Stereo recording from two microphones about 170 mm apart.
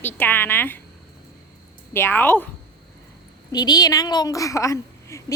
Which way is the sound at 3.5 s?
25° left (ahead or behind).